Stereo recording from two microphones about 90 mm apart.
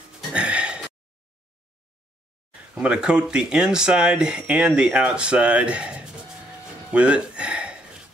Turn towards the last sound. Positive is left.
turn(degrees=-15)  # may be behind; listen again after turning